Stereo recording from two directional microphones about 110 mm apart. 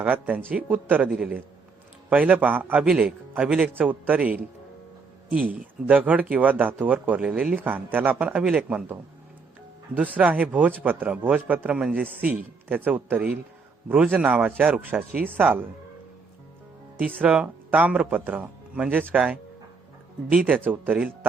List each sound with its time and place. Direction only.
0.0 s speech: 15° right (ahead or behind)
9.9 s speech: 15° right (ahead or behind)
17.2 s speech: 10° right (ahead or behind)